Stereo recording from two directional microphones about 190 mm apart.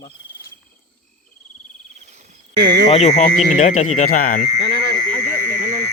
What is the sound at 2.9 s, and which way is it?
Speech, 35° left (ahead or behind).